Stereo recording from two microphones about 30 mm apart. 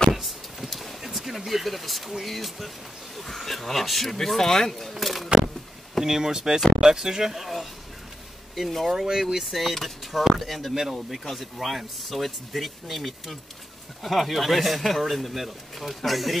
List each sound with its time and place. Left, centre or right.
0.1 s vehicle: centre
2.2 s speech: centre
4.9 s a sound: centre
5.9 s speech: centre
8.5 s speech: centre
8.9 s speech: centre
9.8 s speech: centre
10.8 s speech: centre
11.6 s speech: centre